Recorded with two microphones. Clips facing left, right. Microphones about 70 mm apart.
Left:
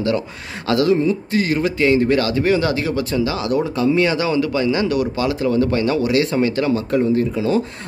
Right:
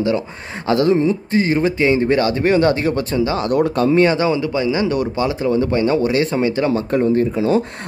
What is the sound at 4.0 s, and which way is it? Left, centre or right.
Speech, right.